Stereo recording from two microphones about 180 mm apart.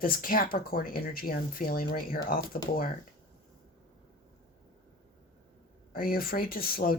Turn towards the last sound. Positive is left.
turn(degrees=55)  # may be behind; listen again after turning